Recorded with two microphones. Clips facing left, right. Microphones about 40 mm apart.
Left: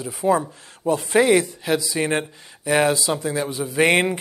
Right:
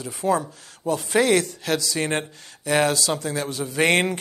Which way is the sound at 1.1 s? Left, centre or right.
Centre.